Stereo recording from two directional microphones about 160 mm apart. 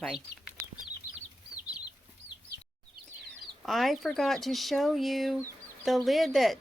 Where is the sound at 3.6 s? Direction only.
Centre (ahead or behind).